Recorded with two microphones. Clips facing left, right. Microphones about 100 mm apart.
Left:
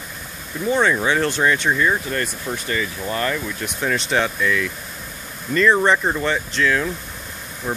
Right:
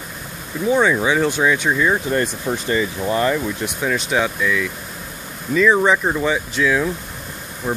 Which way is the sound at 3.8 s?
5° right (ahead or behind).